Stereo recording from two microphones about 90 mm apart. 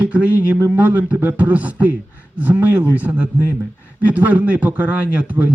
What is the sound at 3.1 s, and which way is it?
A man's voice, 15° right (ahead or behind).